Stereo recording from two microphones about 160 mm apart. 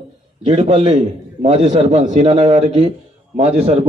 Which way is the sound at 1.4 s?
40° right (ahead or behind).